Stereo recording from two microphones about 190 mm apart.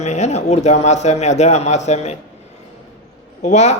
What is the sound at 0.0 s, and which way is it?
A man's voice, 35° left (ahead or behind).